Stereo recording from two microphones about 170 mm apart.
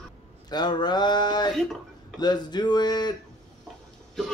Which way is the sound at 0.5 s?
25° left (ahead or behind).